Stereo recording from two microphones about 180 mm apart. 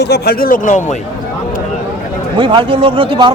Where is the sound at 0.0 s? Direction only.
65° left (ahead or behind); by 0.8 s 50° left (ahead or behind).